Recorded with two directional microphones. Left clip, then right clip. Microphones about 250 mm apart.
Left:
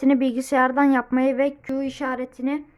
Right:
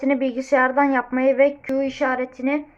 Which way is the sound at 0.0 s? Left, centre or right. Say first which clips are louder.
Left 1 dB; left.